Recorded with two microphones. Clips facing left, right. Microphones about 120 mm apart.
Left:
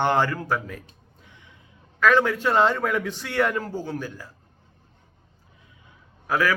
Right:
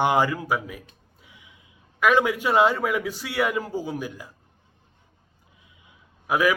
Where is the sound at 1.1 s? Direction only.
10° right (ahead or behind).